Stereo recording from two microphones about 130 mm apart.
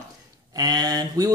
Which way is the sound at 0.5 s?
30° right (ahead or behind).